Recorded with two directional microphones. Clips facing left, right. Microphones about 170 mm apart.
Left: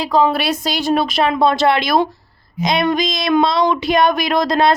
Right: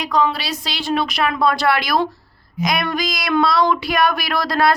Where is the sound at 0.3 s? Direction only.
55° left (ahead or behind).